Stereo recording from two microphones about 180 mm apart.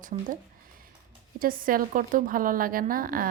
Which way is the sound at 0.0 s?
45° right (ahead or behind).